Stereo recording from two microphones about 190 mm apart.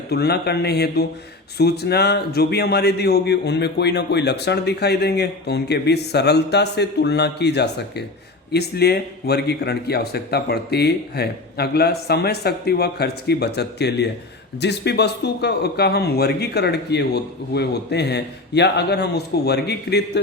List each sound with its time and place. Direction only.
0.1 s a man's voice: 60° left (ahead or behind)